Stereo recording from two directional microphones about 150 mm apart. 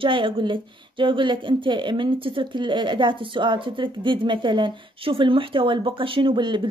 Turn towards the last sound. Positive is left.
turn(degrees=-30)  # may be behind; listen again after turning